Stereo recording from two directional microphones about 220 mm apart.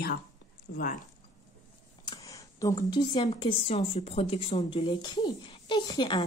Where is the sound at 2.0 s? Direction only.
15° left (ahead or behind).